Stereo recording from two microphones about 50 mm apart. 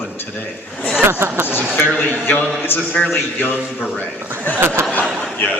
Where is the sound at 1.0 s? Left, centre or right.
Right.